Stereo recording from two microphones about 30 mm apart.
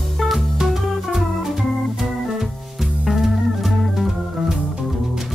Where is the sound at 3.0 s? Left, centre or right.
Centre.